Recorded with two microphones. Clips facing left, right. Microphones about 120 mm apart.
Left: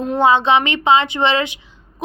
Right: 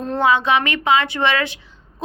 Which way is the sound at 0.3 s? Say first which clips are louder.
Left 3 dB; 25° left (ahead or behind).